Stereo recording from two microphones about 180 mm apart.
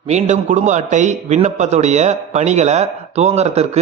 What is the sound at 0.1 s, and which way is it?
A man's voice, 40° right (ahead or behind).